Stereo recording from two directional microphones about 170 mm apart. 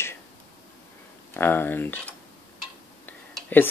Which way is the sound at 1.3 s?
10° left (ahead or behind).